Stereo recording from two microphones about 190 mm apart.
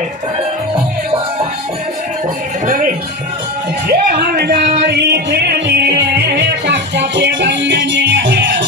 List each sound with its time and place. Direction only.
2.6 s music: 45° right (ahead or behind)
3.9 s music: 55° right (ahead or behind)